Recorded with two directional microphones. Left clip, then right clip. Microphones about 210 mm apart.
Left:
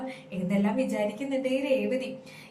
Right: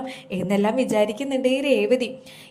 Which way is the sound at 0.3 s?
50° right (ahead or behind).